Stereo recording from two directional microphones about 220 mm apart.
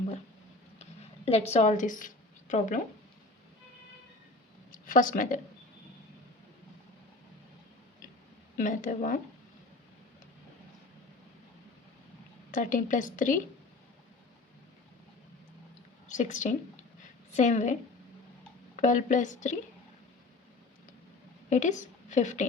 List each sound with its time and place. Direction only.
0.8 s a sound: 30° left (ahead or behind)
4.7 s speech: 40° left (ahead or behind)
8.5 s a woman's voice: 35° left (ahead or behind)
12.5 s a woman's voice: 35° left (ahead or behind)
16.0 s speech: 35° left (ahead or behind)
17.0 s a sound: 35° left (ahead or behind)
18.8 s a woman's voice: 35° left (ahead or behind)
21.5 s a woman's voice: 35° left (ahead or behind)